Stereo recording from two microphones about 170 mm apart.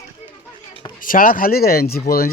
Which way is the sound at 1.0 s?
55° left (ahead or behind).